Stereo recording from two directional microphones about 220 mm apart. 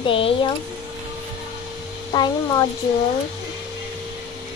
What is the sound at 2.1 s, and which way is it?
Speech, 15° left (ahead or behind).